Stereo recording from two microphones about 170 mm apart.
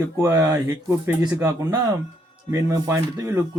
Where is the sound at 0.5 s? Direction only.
10° right (ahead or behind).